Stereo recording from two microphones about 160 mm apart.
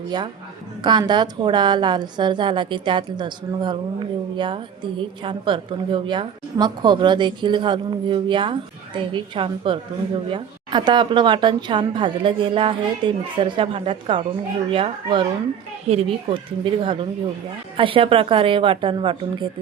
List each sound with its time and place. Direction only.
0.1 s a woman's voice: 25° right (ahead or behind)